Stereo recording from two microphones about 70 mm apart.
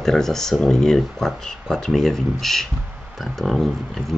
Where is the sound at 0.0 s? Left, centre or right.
Centre.